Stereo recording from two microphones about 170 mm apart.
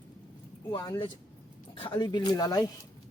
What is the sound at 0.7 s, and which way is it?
Speech, 25° left (ahead or behind).